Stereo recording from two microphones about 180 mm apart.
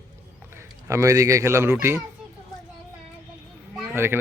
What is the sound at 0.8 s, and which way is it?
Speech, 15° right (ahead or behind).